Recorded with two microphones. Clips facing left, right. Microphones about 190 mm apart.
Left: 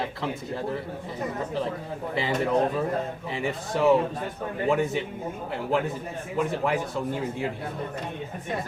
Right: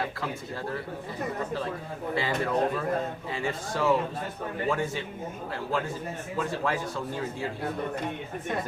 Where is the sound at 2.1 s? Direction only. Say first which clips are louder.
Left 3 dB; 20° left (ahead or behind).